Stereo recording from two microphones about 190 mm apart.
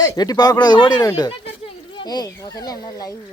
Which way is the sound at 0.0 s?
20° left (ahead or behind).